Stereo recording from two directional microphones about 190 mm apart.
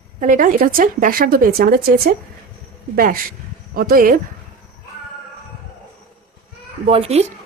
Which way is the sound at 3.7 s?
50° right (ahead or behind).